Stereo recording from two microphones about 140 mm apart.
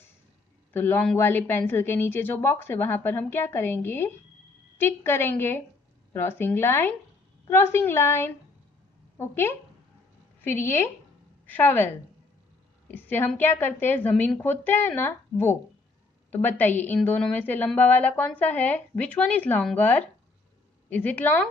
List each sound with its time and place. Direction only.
0.7 s a woman's voice: 15° left (ahead or behind)
11.4 s a woman's voice: 15° left (ahead or behind)